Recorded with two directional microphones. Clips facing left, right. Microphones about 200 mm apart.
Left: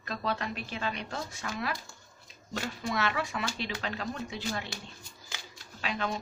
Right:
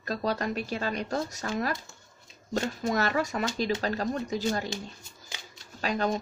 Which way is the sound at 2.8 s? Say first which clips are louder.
Right 3 dB; 40° right (ahead or behind).